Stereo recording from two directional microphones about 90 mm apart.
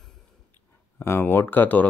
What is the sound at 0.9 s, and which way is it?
Speech, 25° left (ahead or behind).